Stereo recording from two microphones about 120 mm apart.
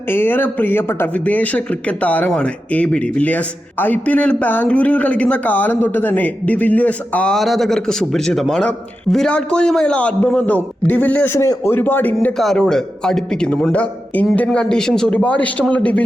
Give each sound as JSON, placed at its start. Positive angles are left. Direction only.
{"t": 0.1, "sound": "speech", "side_deg": 15}
{"t": 12.4, "sound": "speech", "side_deg": 5}